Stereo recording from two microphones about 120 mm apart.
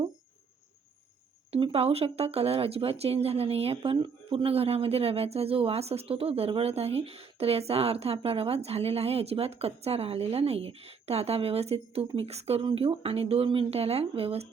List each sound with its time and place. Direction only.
1.5 s speech: 55° right (ahead or behind)